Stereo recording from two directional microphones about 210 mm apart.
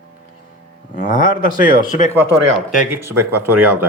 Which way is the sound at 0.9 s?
40° left (ahead or behind).